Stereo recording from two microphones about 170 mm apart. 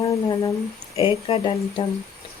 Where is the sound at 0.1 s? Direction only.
20° left (ahead or behind).